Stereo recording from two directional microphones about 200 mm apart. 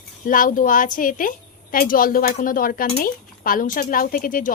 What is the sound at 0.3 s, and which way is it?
Speech, 40° left (ahead or behind).